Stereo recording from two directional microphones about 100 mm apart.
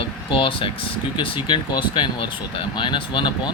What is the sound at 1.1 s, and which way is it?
Speech, 55° left (ahead or behind).